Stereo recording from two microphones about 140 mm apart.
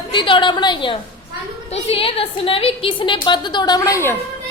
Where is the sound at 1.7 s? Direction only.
45° left (ahead or behind); by 4.1 s 20° left (ahead or behind).